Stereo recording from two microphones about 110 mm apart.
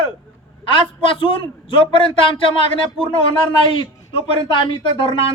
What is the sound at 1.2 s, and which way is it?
Speech, 50° left (ahead or behind).